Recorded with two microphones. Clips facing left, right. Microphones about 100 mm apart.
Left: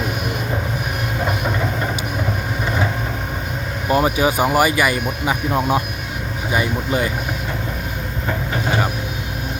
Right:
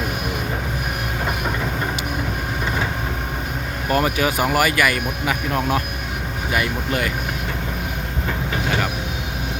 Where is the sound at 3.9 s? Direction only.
15° left (ahead or behind).